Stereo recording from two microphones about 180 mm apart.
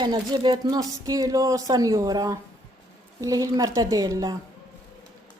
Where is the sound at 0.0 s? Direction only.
25° right (ahead or behind).